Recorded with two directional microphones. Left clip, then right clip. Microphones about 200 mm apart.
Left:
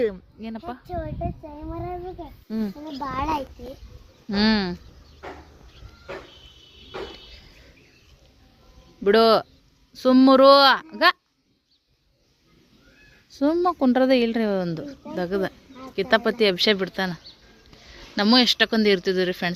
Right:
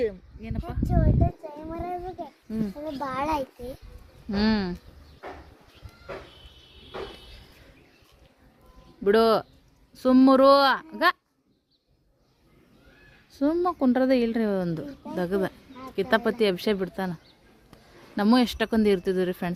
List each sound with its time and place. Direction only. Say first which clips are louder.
0.0 s a sound: left 4 dB; 20° left (ahead or behind)
0.9 s speech: right 4 dB; 5° right (ahead or behind)
2.5 s speech: left 3 dB; 10° left (ahead or behind)
3.0 s a child's voice: left 2 dB; 20° right (ahead or behind)
4.3 s speech: left 4 dB; 5° left (ahead or behind)
9.0 s speech: left 4 dB; centre (ahead or behind)
13.3 s speech: left 3 dB; centre (ahead or behind)
15.7 s a sound: left 1 dB; 25° left (ahead or behind)
16.0 s speech: left 3 dB; 10° right (ahead or behind)
18.2 s speech: left 5 dB; 10° right (ahead or behind)